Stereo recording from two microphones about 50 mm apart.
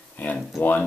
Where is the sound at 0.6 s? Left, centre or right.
Left.